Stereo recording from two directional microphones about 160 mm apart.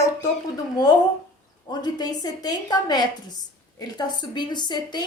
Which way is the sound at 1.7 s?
25° left (ahead or behind).